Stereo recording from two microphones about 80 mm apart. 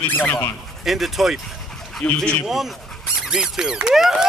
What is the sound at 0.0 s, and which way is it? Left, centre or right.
Speech, left.